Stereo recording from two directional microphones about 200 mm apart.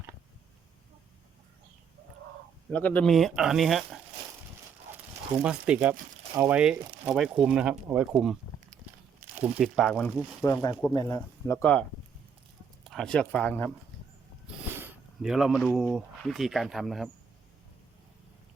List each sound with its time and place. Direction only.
2.6 s speech: 5° left (ahead or behind)
5.4 s speech: 5° right (ahead or behind)
9.4 s speech: 5° right (ahead or behind)
10.4 s speech: 15° left (ahead or behind)
14.8 s speech: centre (ahead or behind)